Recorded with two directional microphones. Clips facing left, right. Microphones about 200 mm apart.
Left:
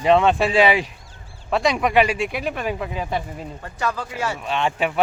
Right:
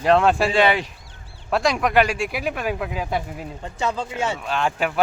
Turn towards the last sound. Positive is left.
turn(degrees=0)  # may be behind; listen again after turning